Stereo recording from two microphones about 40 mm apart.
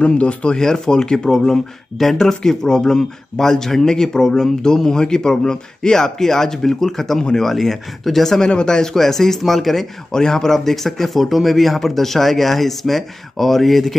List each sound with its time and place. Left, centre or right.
0.0 s speech: left
0.6 s speech: centre
8.5 s a man's voice: left; by 13.9 s centre